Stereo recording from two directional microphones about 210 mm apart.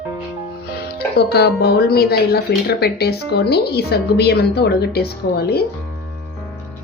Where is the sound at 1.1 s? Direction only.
50° left (ahead or behind).